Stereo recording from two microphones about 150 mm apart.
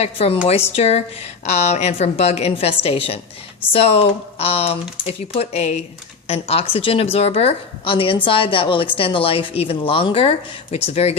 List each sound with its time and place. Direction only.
0.0 s a woman's voice: 40° left (ahead or behind)